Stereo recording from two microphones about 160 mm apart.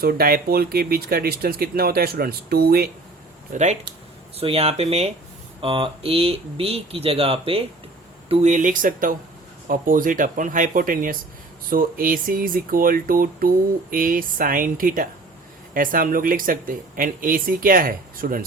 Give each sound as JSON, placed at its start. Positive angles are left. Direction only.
{"t": 0.0, "sound": "speech", "side_deg": -70}
{"t": 3.5, "sound": "speech", "side_deg": -50}